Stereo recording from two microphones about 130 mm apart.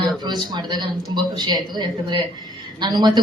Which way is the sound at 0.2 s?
35° right (ahead or behind).